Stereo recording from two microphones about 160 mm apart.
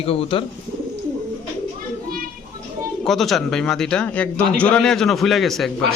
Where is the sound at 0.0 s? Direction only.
35° left (ahead or behind).